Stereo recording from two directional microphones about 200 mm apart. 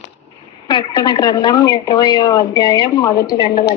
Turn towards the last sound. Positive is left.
turn(degrees=20)  # may be behind; listen again after turning